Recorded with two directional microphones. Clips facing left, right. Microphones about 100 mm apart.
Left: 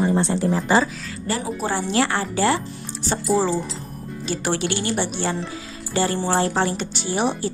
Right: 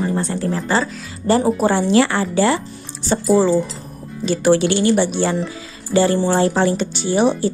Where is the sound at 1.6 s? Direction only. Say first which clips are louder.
Right 8 dB; 75° right (ahead or behind).